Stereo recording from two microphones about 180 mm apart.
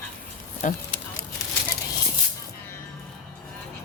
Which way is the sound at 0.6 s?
40° left (ahead or behind).